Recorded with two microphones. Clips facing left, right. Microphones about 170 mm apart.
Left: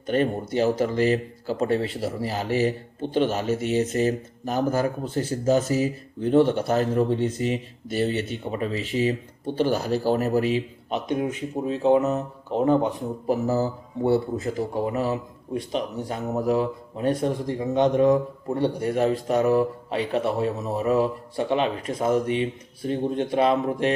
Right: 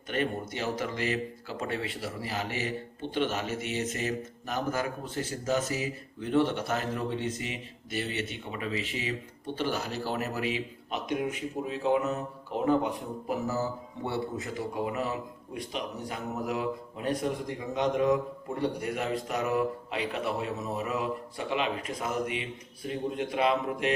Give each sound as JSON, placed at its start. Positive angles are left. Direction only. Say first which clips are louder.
{"t": 0.1, "sound": "speech", "louder": "left 8 dB", "side_deg": 35}